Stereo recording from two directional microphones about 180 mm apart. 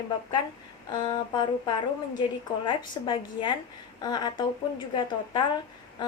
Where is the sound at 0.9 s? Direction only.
25° left (ahead or behind).